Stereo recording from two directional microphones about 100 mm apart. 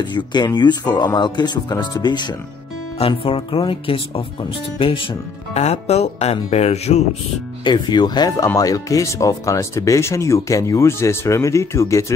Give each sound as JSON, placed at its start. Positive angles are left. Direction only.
{"t": 0.1, "sound": "speech", "side_deg": 45}
{"t": 3.0, "sound": "speech", "side_deg": 65}
{"t": 5.5, "sound": "speech", "side_deg": 90}
{"t": 7.6, "sound": "speech", "side_deg": 45}